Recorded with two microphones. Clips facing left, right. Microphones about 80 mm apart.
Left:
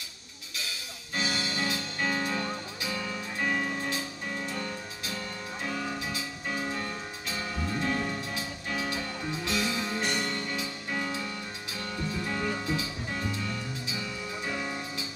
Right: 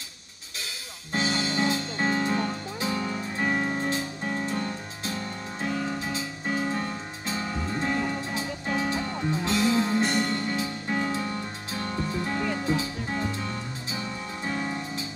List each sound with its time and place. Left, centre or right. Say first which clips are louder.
1.1 s music: right 5 dB; right
5.6 s music: right 4 dB; right